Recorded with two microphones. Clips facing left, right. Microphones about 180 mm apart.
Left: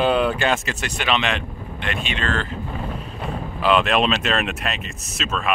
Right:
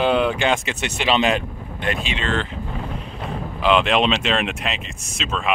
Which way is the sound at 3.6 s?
15° right (ahead or behind).